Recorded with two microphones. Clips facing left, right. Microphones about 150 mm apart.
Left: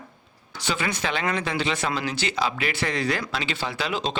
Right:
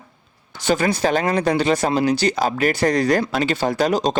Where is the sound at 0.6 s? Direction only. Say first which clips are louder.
Right 9 dB; 40° right (ahead or behind).